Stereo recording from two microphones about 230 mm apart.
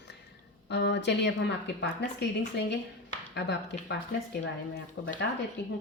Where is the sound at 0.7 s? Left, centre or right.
Left.